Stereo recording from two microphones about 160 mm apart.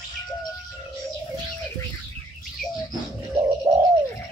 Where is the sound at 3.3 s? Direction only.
20° right (ahead or behind).